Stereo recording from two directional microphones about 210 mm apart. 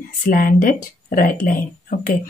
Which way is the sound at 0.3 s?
40° left (ahead or behind).